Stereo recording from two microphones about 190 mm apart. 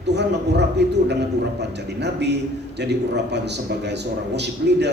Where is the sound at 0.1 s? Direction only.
65° right (ahead or behind).